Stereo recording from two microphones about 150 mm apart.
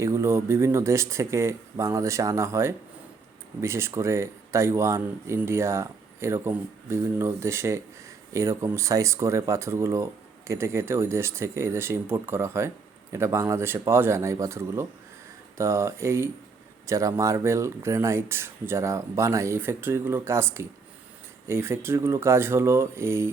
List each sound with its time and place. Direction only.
0.0 s speech: 20° right (ahead or behind)